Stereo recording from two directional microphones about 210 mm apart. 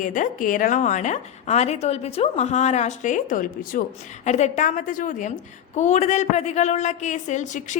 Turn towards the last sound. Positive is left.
turn(degrees=35)  # may be behind; listen again after turning